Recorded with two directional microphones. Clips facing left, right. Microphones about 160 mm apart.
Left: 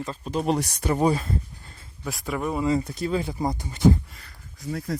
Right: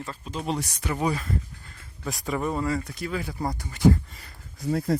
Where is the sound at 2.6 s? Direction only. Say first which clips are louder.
Left 4 dB; 20° left (ahead or behind).